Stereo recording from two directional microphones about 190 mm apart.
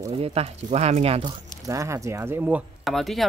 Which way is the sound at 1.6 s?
15° right (ahead or behind).